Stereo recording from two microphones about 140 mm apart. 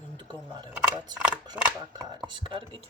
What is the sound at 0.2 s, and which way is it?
Speech, 35° right (ahead or behind).